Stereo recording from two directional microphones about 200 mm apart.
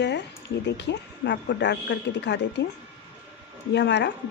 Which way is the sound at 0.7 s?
60° left (ahead or behind).